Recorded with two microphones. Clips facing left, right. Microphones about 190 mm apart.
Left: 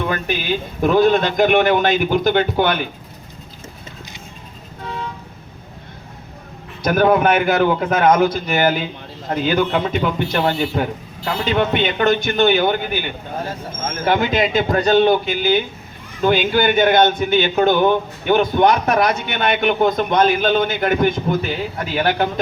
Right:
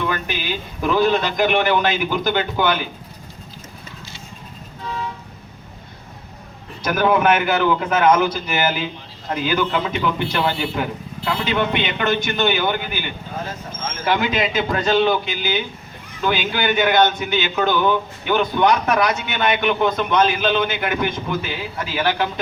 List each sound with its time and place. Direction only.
0.0 s speech: 50° left (ahead or behind)
6.8 s speech: 50° left (ahead or behind)